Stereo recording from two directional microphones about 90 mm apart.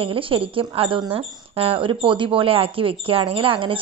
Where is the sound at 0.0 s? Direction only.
80° right.